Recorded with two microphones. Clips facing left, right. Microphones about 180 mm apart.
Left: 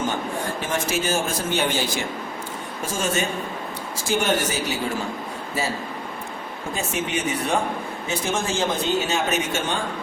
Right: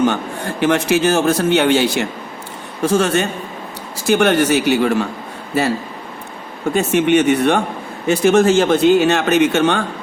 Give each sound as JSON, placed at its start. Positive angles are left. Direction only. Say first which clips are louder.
{"t": 0.6, "sound": "a man's voice", "louder": "right 13 dB", "side_deg": -70}
{"t": 6.7, "sound": "speech", "louder": "right 13 dB", "side_deg": -70}